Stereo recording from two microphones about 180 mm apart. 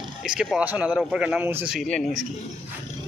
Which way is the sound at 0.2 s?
Centre (ahead or behind).